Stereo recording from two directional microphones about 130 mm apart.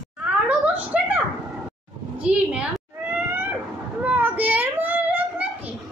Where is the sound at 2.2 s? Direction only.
10° right (ahead or behind).